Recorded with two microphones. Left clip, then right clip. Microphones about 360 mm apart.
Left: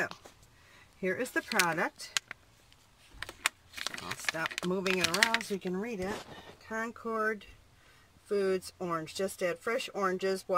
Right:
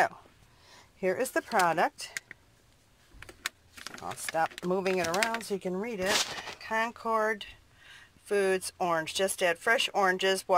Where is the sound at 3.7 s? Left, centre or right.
Centre.